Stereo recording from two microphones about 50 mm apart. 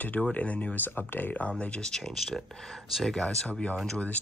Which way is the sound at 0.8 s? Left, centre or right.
Left.